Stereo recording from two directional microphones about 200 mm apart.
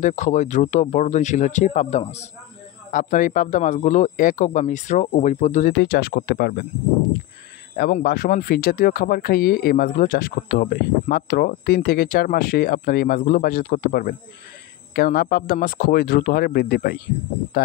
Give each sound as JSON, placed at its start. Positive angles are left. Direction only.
{"t": 0.0, "sound": "speech", "side_deg": 40}
{"t": 5.7, "sound": "speech", "side_deg": 50}
{"t": 7.7, "sound": "speech", "side_deg": 50}